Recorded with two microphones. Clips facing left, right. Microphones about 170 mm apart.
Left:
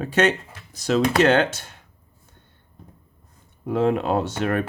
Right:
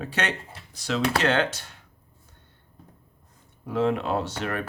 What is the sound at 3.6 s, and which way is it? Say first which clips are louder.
Speech: left 4 dB; 45° left (ahead or behind).